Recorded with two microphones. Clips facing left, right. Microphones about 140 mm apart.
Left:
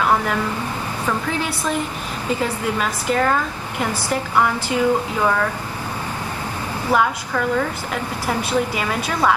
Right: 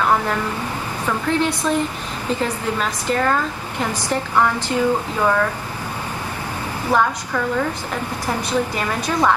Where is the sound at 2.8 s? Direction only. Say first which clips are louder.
Left 1 dB; 5° left (ahead or behind).